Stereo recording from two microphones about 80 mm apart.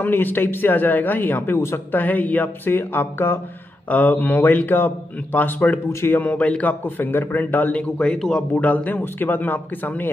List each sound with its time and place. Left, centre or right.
0.0 s speech: left
5.9 s speech: left
6.1 s speech: centre